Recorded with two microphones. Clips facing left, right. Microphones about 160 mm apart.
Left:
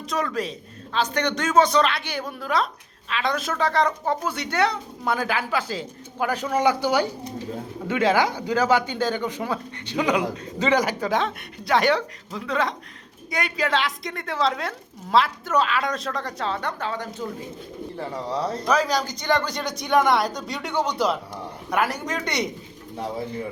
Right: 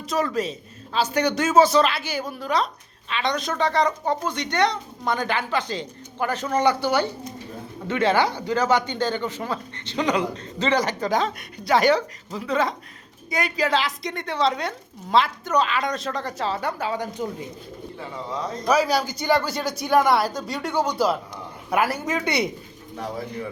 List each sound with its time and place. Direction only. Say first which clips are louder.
0.0 s a woman's voice: right 2 dB; centre (ahead or behind)
18.1 s a man's voice: left 3 dB; 35° left (ahead or behind)
18.7 s a woman's voice: right 3 dB; 10° right (ahead or behind)